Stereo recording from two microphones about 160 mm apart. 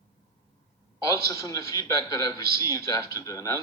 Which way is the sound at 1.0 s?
20° left (ahead or behind).